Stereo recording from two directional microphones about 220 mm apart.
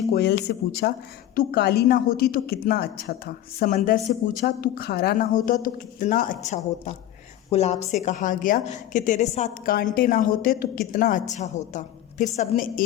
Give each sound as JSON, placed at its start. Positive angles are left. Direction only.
{"t": 0.1, "sound": "a woman's voice", "side_deg": 50}